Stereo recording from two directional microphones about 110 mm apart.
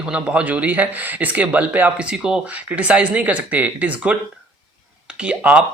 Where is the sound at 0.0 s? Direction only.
10° right (ahead or behind).